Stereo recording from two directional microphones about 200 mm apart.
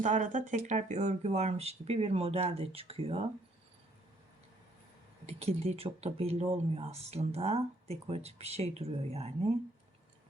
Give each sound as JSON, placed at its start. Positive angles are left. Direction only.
{"t": 0.0, "sound": "speech", "side_deg": -40}
{"t": 5.2, "sound": "speech", "side_deg": -30}